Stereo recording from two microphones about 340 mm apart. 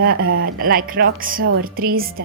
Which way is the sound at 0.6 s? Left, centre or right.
Right.